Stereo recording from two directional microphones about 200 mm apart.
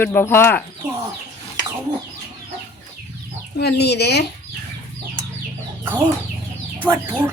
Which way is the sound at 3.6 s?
55° left (ahead or behind).